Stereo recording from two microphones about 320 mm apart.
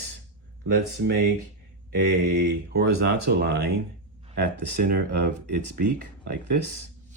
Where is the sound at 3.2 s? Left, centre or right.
Right.